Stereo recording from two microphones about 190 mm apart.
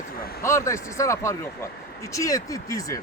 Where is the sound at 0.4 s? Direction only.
15° left (ahead or behind).